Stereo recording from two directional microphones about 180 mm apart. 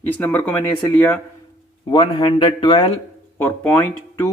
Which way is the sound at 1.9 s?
25° left (ahead or behind).